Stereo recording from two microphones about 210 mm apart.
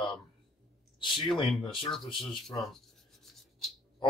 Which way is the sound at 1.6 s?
25° left (ahead or behind).